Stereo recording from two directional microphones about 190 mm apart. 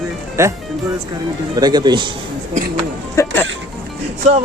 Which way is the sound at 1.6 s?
20° right (ahead or behind).